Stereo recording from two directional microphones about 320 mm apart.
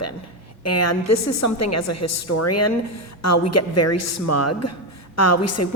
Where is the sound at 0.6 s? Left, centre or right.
Left.